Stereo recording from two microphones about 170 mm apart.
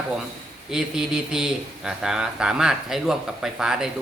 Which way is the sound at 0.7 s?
5° right (ahead or behind).